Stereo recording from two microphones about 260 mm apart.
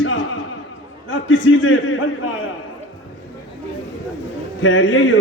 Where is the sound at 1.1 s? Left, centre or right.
Left.